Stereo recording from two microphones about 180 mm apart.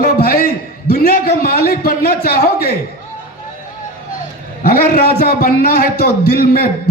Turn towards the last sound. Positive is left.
turn(degrees=55)  # may be behind; listen again after turning